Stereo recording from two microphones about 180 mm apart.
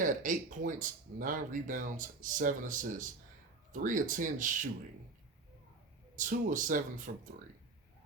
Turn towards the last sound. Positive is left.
turn(degrees=-55)  # may be behind; listen again after turning